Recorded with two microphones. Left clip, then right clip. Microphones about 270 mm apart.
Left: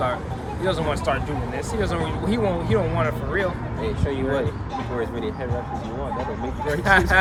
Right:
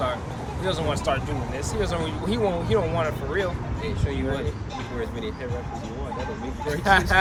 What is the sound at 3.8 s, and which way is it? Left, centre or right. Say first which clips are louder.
Speech: left 4 dB; centre.